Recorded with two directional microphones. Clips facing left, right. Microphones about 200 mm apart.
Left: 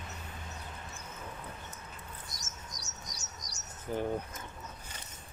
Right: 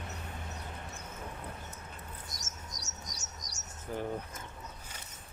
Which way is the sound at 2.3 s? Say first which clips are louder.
Right 1 dB; 45° right (ahead or behind).